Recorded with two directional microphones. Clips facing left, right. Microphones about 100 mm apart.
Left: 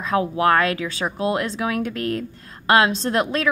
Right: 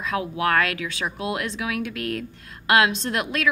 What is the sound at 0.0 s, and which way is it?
Speech, 35° left (ahead or behind).